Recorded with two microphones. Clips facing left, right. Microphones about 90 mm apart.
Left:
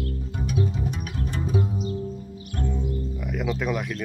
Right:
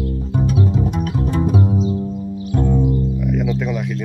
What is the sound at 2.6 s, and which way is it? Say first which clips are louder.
Music: right 11 dB; 65° right (ahead or behind).